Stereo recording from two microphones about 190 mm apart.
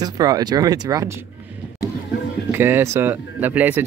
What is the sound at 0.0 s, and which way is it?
Speech, 20° right (ahead or behind).